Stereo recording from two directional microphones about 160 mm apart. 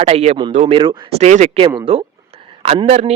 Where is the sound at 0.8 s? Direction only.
30° right (ahead or behind).